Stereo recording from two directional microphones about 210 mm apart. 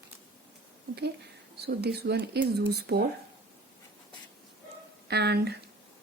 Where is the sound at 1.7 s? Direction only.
50° right (ahead or behind).